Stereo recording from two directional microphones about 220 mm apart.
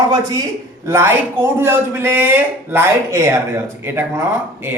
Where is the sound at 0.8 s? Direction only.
10° right (ahead or behind).